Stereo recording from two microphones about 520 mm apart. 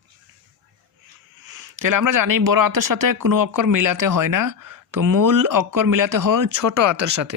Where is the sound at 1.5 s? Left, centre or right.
Right.